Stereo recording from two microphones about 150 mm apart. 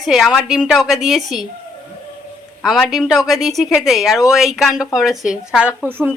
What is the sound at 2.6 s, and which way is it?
A woman's voice, centre (ahead or behind).